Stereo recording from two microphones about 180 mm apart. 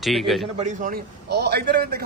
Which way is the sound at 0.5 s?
45° right (ahead or behind).